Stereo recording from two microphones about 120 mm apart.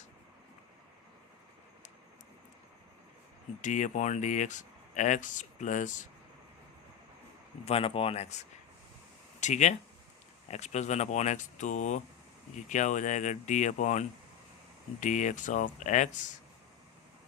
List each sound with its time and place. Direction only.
3.6 s speech: 90° left
7.6 s speech: 55° left (ahead or behind)
9.4 s speech: 80° left